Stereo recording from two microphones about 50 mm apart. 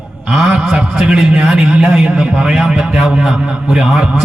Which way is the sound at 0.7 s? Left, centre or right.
Centre.